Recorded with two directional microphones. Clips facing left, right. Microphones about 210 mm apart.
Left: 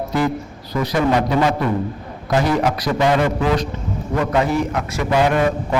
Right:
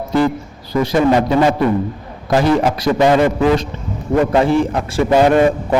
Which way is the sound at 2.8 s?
25° right (ahead or behind).